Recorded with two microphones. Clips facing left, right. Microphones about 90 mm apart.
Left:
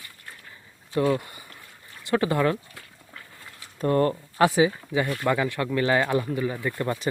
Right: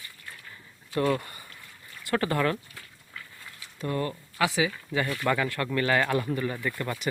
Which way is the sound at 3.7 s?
45° left (ahead or behind).